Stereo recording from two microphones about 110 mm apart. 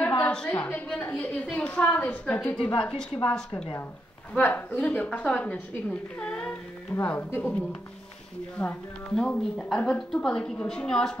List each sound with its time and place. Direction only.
0.2 s a woman's voice: 10° left (ahead or behind)